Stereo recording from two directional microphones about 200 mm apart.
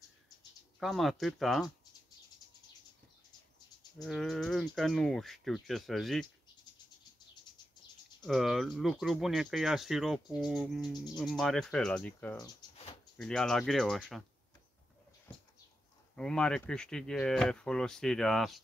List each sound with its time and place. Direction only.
0.7 s speech: centre (ahead or behind)
4.0 s speech: centre (ahead or behind)
8.2 s speech: centre (ahead or behind)
12.4 s a sound: 30° left (ahead or behind)
13.2 s speech: 5° left (ahead or behind)
16.2 s speech: 5° left (ahead or behind)